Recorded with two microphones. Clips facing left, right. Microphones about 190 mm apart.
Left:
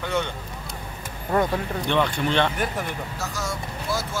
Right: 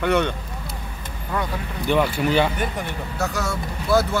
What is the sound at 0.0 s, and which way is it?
Speech, 65° right (ahead or behind).